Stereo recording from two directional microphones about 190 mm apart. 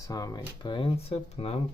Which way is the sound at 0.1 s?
20° left (ahead or behind).